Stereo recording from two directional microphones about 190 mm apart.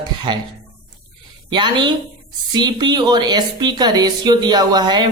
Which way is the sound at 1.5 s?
25° right (ahead or behind).